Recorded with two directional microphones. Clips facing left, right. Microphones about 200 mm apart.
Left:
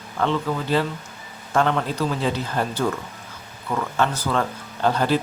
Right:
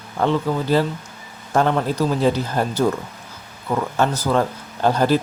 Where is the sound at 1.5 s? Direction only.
35° right (ahead or behind).